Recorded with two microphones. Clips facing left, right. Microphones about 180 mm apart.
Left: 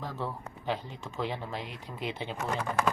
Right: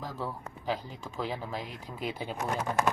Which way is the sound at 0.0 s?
5° right (ahead or behind).